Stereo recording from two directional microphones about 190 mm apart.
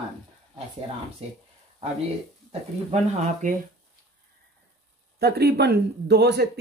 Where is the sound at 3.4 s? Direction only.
40° right (ahead or behind).